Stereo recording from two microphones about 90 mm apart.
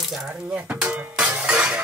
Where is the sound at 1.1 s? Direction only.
10° right (ahead or behind).